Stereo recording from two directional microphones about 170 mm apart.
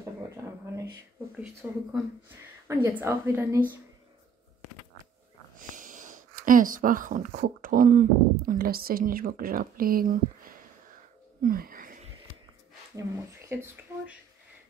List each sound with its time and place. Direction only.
0.4 s speech: 20° right (ahead or behind)
1.4 s a woman's voice: 5° right (ahead or behind)
5.6 s speech: 50° right (ahead or behind)
11.4 s a sound: 55° right (ahead or behind)
13.5 s a woman's voice: 15° right (ahead or behind)